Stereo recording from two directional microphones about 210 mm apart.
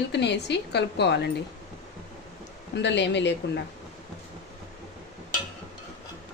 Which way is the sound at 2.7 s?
55° left (ahead or behind).